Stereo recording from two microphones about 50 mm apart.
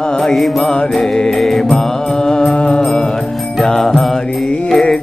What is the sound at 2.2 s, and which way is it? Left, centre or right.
Music, centre.